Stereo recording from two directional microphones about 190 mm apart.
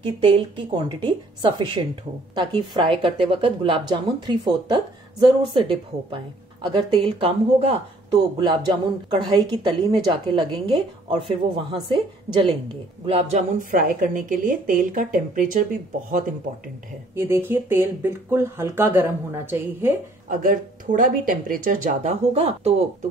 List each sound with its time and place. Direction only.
0.0 s a woman's voice: 25° right (ahead or behind); by 15.5 s 45° right (ahead or behind)
17.1 s speech: 10° right (ahead or behind)
20.2 s speech: 45° right (ahead or behind)
22.3 s a woman's voice: 30° right (ahead or behind)